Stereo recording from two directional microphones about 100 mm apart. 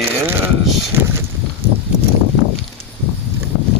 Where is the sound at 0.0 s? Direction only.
25° right (ahead or behind).